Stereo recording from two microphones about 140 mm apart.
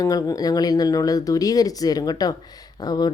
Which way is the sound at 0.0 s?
25° left (ahead or behind).